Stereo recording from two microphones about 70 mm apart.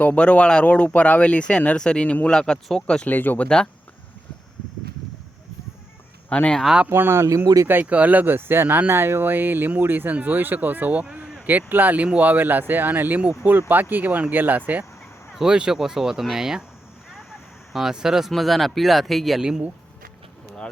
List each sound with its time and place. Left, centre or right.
0.0 s speech: left
3.1 s speech: left
6.2 s speech: centre
6.9 s speech: right
7.4 s speech: right
7.7 s speech: right
11.0 s a sound: centre
11.4 s speech: right
15.3 s speech: centre
17.7 s speech: centre
19.4 s speech: centre